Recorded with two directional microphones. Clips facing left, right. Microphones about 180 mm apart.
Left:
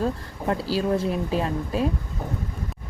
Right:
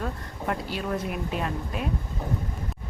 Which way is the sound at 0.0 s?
30° left (ahead or behind).